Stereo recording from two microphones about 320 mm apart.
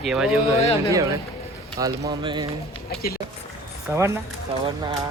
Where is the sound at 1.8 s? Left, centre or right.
Centre.